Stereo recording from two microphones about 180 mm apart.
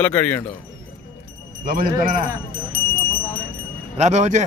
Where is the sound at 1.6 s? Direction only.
55° right (ahead or behind).